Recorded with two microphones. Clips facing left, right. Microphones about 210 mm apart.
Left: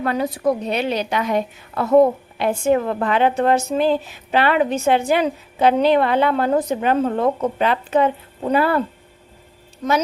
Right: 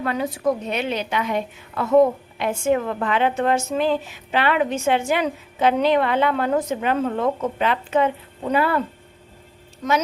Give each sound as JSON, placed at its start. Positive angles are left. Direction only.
{"t": 0.0, "sound": "a woman's voice", "side_deg": 40}